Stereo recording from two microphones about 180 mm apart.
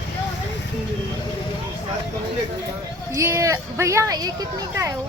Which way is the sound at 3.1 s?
15° right (ahead or behind).